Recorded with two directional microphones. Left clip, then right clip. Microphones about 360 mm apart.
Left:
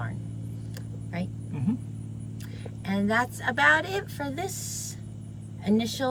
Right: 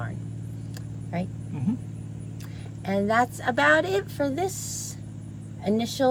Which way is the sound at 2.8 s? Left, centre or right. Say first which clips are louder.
Right 4 dB; centre.